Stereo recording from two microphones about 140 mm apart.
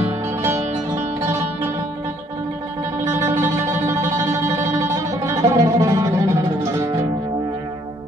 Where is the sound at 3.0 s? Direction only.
20° right (ahead or behind).